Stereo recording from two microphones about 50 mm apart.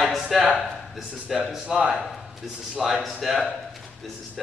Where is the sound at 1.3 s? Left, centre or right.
Centre.